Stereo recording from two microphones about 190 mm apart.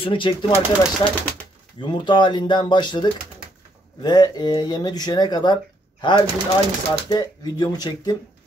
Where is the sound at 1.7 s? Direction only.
25° left (ahead or behind).